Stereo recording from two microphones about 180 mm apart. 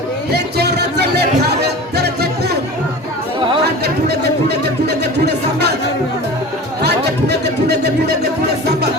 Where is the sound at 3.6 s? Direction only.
65° right (ahead or behind).